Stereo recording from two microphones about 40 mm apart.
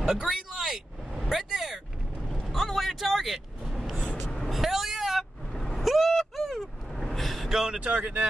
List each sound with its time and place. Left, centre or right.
0.0 s vehicle: centre
7.4 s vehicle: centre
7.8 s a sound: right